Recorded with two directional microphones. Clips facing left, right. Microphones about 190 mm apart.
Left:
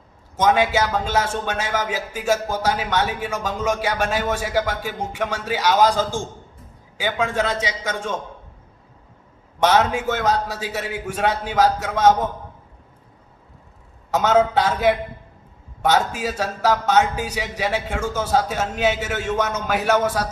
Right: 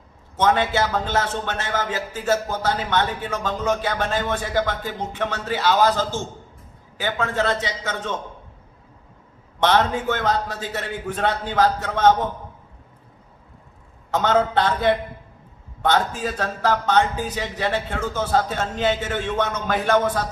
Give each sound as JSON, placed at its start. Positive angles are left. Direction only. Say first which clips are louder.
{"t": 0.3, "sound": "speech", "louder": "left 2 dB", "side_deg": 10}
{"t": 9.6, "sound": "speech", "louder": "left 1 dB", "side_deg": 10}
{"t": 14.1, "sound": "speech", "louder": "left 2 dB", "side_deg": 10}